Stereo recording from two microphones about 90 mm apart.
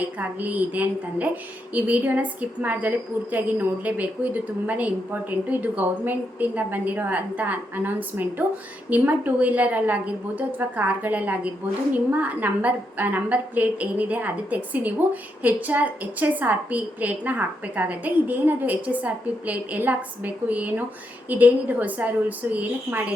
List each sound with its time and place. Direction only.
0.2 s a woman's voice: 20° right (ahead or behind)